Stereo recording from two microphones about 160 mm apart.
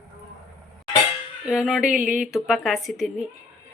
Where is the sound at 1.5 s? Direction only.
5° right (ahead or behind).